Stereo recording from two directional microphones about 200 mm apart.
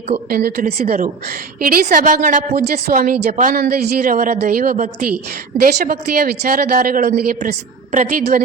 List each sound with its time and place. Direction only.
0.3 s a woman's voice: 50° right (ahead or behind)